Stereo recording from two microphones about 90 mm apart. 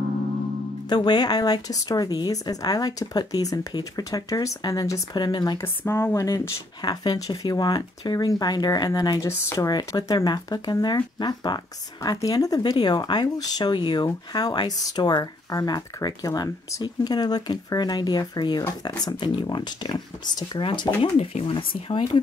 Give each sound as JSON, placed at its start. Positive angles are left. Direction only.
{"t": 0.8, "sound": "speech", "side_deg": 55}
{"t": 5.1, "sound": "speech", "side_deg": 50}
{"t": 5.6, "sound": "speech", "side_deg": 30}
{"t": 6.8, "sound": "speech", "side_deg": 50}
{"t": 12.7, "sound": "speech", "side_deg": 55}
{"t": 20.6, "sound": "speech", "side_deg": 70}